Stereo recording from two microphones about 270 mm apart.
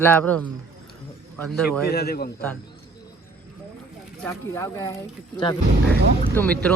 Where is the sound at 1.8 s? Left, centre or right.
Left.